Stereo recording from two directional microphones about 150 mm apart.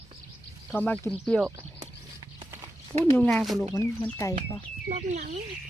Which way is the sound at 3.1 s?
10° left (ahead or behind).